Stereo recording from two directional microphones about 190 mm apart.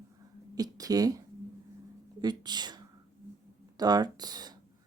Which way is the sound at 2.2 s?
20° right (ahead or behind).